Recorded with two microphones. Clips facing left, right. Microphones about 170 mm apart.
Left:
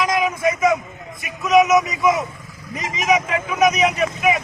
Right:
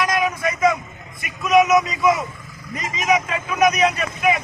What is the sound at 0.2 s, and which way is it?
Vehicle, 10° left (ahead or behind).